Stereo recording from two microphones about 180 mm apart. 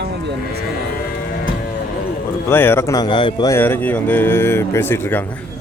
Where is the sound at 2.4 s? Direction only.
15° left (ahead or behind).